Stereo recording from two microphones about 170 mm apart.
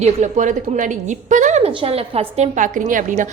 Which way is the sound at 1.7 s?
35° right (ahead or behind).